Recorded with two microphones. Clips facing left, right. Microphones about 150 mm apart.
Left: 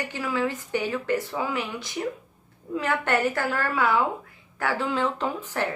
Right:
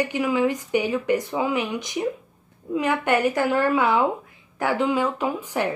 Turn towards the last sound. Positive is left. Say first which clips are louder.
# right 3 dB
turn(degrees=-10)  # may be behind; listen again after turning